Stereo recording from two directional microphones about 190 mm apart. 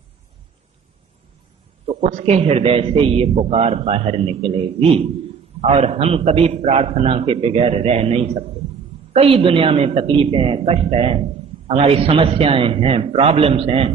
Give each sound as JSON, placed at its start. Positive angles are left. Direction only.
{"t": 2.0, "sound": "a man's voice", "side_deg": -35}